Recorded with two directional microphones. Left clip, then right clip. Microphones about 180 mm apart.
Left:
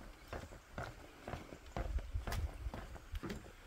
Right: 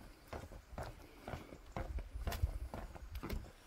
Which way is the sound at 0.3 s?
15° right (ahead or behind).